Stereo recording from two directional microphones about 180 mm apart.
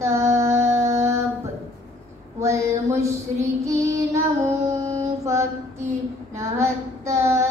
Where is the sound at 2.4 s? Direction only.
15° right (ahead or behind).